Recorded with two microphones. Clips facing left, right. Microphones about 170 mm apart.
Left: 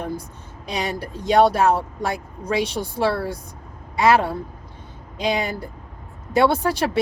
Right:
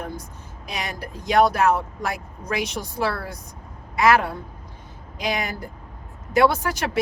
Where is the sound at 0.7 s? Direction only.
30° left (ahead or behind).